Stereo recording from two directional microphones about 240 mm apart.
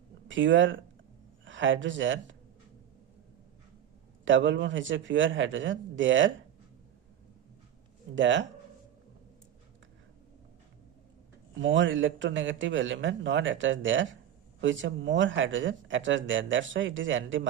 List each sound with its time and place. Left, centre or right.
0.3 s a man's voice: right
4.3 s a man's voice: right
8.1 s a man's voice: right
11.6 s a man's voice: right